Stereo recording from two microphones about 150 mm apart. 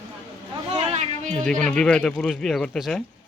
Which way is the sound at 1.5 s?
5° left (ahead or behind).